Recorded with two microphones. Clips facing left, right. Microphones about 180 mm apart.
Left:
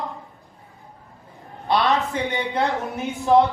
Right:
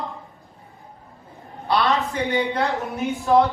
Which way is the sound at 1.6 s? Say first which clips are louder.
Left 1 dB; 20° left (ahead or behind).